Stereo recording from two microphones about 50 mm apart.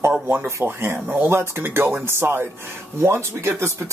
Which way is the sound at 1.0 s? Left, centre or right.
Right.